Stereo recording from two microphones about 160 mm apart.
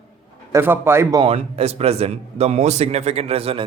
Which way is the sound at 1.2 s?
40° right (ahead or behind).